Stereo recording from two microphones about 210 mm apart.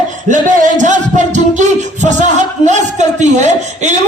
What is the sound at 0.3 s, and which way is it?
Speech, 35° right (ahead or behind).